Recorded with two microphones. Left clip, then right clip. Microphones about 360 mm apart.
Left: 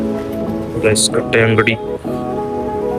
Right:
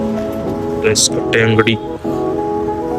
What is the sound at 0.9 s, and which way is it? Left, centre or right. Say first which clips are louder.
Speech: even; centre.